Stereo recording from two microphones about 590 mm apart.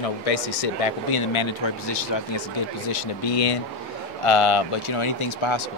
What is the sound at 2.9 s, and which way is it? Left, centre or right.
Speech, left.